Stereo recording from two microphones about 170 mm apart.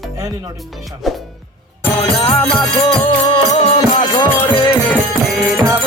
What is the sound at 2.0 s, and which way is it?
Music, 30° left (ahead or behind).